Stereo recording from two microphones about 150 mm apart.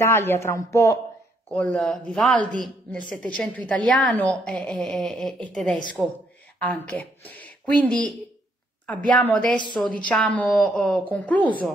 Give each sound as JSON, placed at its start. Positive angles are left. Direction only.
{"t": 0.0, "sound": "speech", "side_deg": 15}
{"t": 1.5, "sound": "a woman's voice", "side_deg": 10}